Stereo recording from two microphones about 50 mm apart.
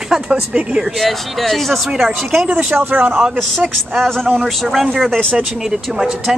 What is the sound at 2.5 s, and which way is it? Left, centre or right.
Speech, right.